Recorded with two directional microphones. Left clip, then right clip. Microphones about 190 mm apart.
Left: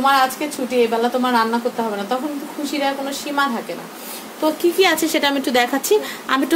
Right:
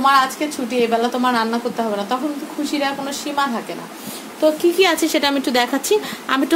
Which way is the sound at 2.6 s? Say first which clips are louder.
Even; 15° right (ahead or behind).